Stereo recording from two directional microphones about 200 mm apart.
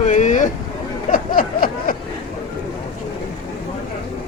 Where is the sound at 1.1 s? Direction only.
45° left (ahead or behind).